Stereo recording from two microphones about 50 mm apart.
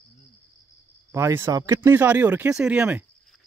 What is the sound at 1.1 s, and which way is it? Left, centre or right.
Speech, right.